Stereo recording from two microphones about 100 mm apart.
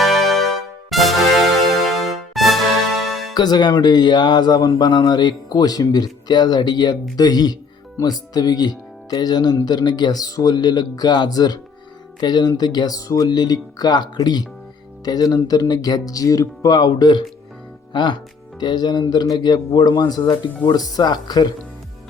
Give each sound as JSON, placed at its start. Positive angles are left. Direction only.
{"t": 0.0, "sound": "music", "side_deg": 0}
{"t": 3.3, "sound": "speech", "side_deg": 45}